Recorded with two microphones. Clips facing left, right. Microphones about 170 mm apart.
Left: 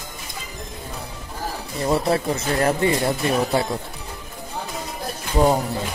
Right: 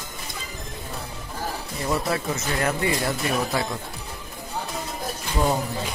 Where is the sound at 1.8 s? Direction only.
30° left (ahead or behind).